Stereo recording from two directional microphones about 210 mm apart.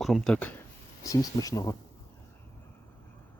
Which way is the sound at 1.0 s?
15° left (ahead or behind).